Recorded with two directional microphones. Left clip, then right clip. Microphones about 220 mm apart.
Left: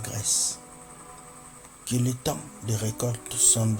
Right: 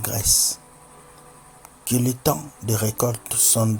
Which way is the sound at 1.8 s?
25° right (ahead or behind).